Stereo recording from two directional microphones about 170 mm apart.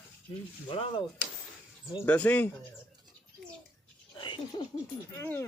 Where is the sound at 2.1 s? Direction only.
10° left (ahead or behind).